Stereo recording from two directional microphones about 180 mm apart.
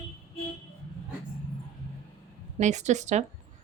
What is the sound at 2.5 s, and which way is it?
Speech, 40° right (ahead or behind).